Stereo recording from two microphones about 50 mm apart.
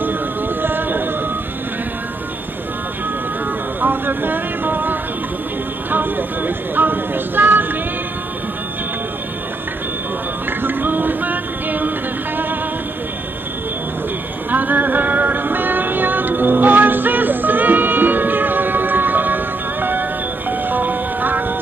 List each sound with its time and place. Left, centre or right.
0.6 s music: right
3.8 s vehicle: right
5.9 s a sound: right
10.6 s music: right
14.5 s music: right